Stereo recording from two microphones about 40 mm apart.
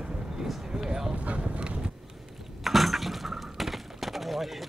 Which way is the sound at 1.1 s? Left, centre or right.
Right.